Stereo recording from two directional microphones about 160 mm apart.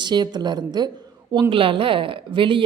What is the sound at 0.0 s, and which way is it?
A woman's voice, 25° right (ahead or behind).